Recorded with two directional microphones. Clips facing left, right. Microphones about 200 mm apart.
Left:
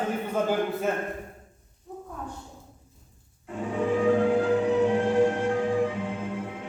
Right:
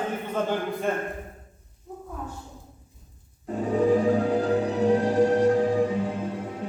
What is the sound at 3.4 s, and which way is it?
Music, 40° right (ahead or behind).